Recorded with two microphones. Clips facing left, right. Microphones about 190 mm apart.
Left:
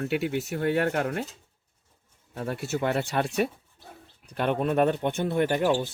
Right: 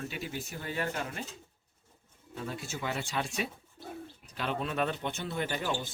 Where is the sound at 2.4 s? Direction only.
60° left (ahead or behind).